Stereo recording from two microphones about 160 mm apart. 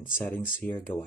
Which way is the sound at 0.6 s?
10° left (ahead or behind).